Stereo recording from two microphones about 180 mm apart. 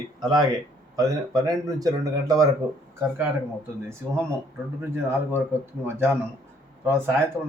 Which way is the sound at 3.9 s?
15° right (ahead or behind).